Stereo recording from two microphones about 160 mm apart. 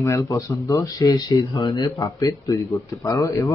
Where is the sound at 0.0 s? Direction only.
20° left (ahead or behind).